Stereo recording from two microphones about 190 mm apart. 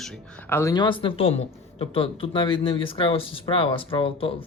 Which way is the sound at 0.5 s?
20° left (ahead or behind).